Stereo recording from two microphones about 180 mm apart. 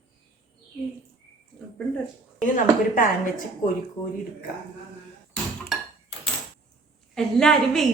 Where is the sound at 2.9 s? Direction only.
50° left (ahead or behind).